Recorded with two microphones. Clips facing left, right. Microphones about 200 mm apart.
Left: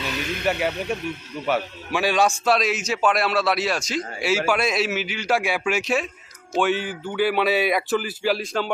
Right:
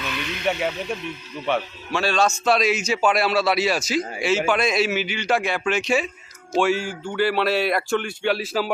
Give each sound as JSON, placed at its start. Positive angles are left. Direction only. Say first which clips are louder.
{"t": 0.0, "sound": "speech", "louder": "left 2 dB", "side_deg": 40}
{"t": 0.6, "sound": "a man's voice", "louder": "left 1 dB", "side_deg": 5}
{"t": 2.4, "sound": "speech", "louder": "right 1 dB", "side_deg": 0}
{"t": 4.3, "sound": "speech", "louder": "even", "side_deg": 5}